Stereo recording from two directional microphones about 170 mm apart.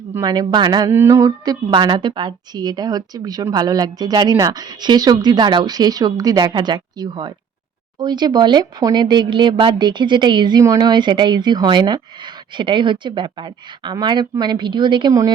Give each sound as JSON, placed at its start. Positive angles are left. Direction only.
{"t": 0.1, "sound": "speech", "side_deg": -20}